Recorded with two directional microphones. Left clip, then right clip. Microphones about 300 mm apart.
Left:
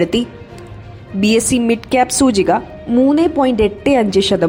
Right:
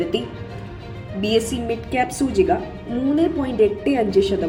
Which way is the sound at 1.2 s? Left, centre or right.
Left.